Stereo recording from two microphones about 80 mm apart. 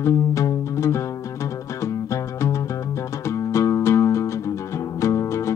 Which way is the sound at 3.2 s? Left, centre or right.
Left.